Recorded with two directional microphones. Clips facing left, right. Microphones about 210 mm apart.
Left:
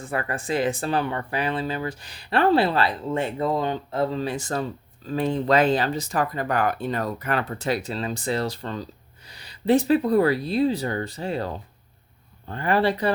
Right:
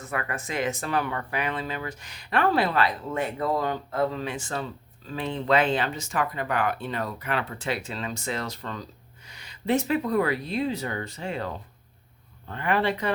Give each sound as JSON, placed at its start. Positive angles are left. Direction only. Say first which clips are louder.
{"t": 0.0, "sound": "speech", "louder": "left 3 dB", "side_deg": 30}